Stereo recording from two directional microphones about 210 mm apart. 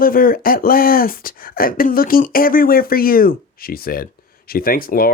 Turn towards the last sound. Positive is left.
turn(degrees=45)  # may be behind; listen again after turning